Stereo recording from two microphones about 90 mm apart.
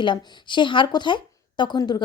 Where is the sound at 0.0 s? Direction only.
60° left (ahead or behind).